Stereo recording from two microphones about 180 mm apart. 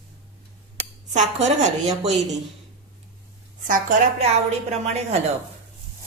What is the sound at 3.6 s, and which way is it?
Speech, 50° right (ahead or behind).